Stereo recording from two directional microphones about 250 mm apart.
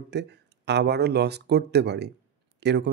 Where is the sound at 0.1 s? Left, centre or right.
Right.